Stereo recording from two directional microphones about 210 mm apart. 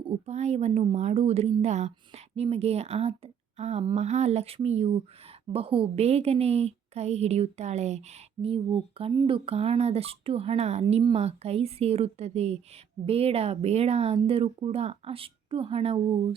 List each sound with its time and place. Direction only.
0.1 s a woman's voice: 30° right (ahead or behind)